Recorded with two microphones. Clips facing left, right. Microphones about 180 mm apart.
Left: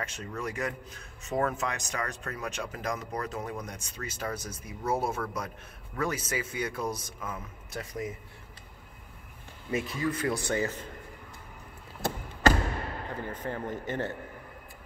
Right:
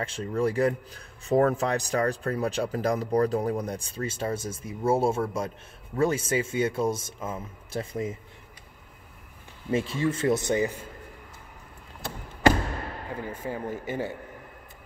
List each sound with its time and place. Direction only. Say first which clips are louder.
0.0 s a man's voice: right 9 dB; 30° right (ahead or behind)
9.7 s a man's voice: right 4 dB; 30° right (ahead or behind)
13.1 s speech: right 3 dB; 10° right (ahead or behind)